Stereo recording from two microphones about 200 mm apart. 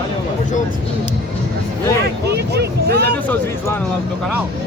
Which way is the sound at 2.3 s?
55° right (ahead or behind).